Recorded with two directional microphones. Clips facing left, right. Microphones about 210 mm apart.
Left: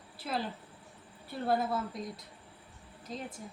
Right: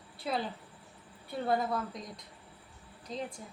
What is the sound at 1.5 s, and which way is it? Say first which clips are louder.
Speech: left 1 dB; 5° left (ahead or behind).